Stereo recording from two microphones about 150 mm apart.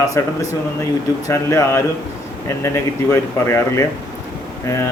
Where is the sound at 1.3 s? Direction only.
20° left (ahead or behind).